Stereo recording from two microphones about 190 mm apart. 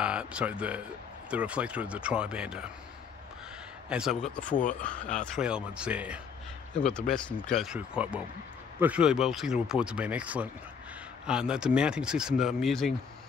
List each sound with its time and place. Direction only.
0.0 s speech: 5° right (ahead or behind)
3.9 s speech: centre (ahead or behind)
4.5 s speech: 45° left (ahead or behind)
5.2 s speech: centre (ahead or behind)
6.7 s speech: 5° left (ahead or behind)